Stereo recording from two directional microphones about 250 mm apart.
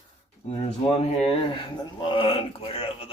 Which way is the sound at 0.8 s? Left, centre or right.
Left.